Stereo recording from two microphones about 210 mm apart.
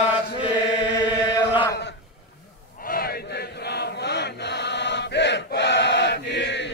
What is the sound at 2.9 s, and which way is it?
Chant, 45° left (ahead or behind).